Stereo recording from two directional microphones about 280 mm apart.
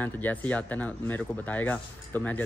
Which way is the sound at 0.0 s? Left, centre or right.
Centre.